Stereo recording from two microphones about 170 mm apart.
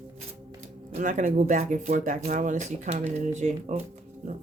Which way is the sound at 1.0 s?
50° right (ahead or behind).